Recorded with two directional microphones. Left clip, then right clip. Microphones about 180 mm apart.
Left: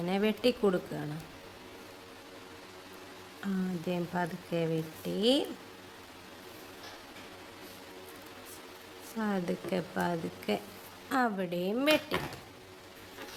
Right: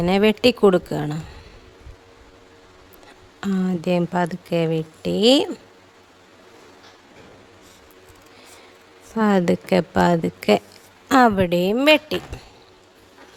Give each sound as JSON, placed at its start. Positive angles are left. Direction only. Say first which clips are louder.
{"t": 0.0, "sound": "speech", "louder": "right 13 dB", "side_deg": -65}
{"t": 3.4, "sound": "speech", "louder": "right 12 dB", "side_deg": -60}
{"t": 9.1, "sound": "speech", "louder": "right 15 dB", "side_deg": -65}